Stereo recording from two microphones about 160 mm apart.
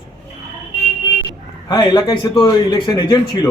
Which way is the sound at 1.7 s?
25° left (ahead or behind).